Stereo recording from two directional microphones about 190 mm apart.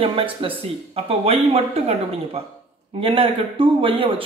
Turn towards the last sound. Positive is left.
turn(degrees=-30)  # may be behind; listen again after turning